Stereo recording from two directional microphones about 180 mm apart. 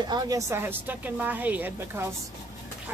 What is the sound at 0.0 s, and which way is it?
Speech, 25° right (ahead or behind).